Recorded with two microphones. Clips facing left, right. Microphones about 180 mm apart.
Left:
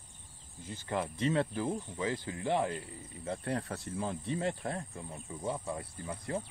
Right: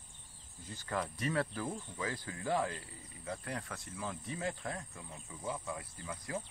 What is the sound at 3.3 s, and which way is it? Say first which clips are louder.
Speech: left 6 dB; 30° left (ahead or behind).